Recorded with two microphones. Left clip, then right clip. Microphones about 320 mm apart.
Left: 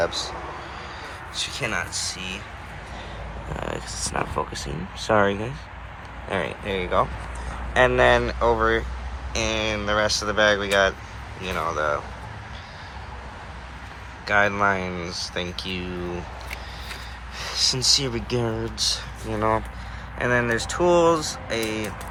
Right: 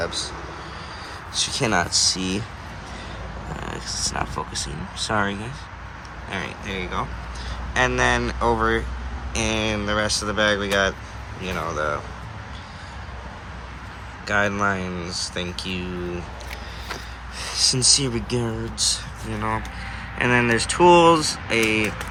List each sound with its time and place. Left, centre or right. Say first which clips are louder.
0.0 s speech: left 2 dB; centre
1.4 s speech: right 5 dB; centre
3.6 s speech: right 2 dB; centre
14.3 s speech: left 2 dB; centre
17.3 s a sound: right 2 dB; centre
18.3 s speech: left 1 dB; centre